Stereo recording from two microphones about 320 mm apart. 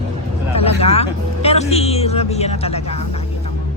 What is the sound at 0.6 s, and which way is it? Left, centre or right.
Speech, centre.